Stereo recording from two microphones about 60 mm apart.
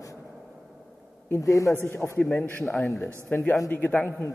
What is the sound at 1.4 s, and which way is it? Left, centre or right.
Speech, left.